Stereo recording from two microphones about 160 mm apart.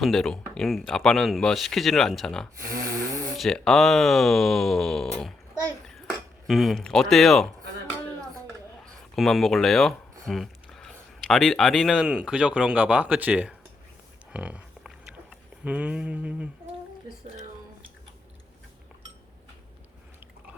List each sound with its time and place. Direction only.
0.0 s speech: centre (ahead or behind)
2.6 s snoring: 20° right (ahead or behind)
3.3 s speech: centre (ahead or behind)
6.5 s speech: centre (ahead or behind)
8.8 s speech: centre (ahead or behind)
14.3 s a sound: 10° right (ahead or behind)